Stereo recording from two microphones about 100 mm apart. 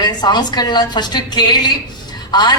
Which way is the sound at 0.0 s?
45° left (ahead or behind).